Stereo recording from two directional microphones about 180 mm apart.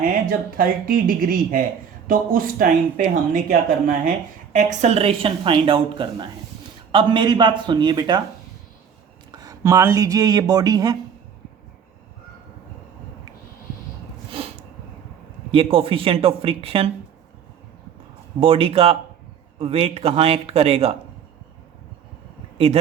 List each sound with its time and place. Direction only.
0.0 s a woman's voice: 55° right (ahead or behind); by 8.2 s 25° right (ahead or behind)
9.3 s speech: 20° right (ahead or behind)
15.5 s a woman's voice: 30° right (ahead or behind)
18.3 s a woman's voice: 30° right (ahead or behind)
22.5 s speech: 35° right (ahead or behind)